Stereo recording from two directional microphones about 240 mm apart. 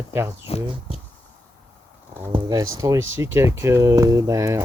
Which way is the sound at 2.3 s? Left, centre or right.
Centre.